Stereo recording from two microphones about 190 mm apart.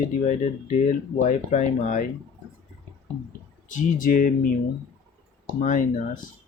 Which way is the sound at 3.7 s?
45° left (ahead or behind).